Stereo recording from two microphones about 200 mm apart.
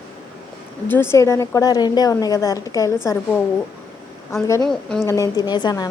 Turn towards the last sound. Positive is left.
turn(degrees=20)  # may be behind; listen again after turning